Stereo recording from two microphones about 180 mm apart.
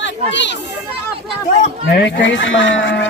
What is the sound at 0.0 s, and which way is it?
Speech, 80° left.